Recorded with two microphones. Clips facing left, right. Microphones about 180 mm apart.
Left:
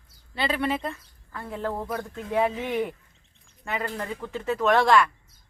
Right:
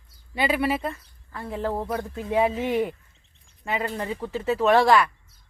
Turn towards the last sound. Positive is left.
turn(degrees=-5)  # may be behind; listen again after turning